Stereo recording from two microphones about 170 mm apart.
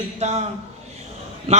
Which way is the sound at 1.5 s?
40° right (ahead or behind).